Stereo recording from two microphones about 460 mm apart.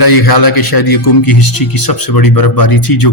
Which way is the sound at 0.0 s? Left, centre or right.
Left.